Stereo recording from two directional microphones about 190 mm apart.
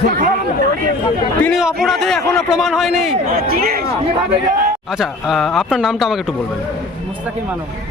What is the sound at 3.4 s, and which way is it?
Speech, 55° right (ahead or behind).